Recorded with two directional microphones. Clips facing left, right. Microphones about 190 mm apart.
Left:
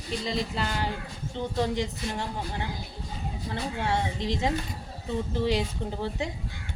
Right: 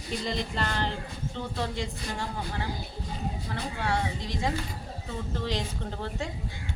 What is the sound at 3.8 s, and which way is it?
Speech, 25° left (ahead or behind).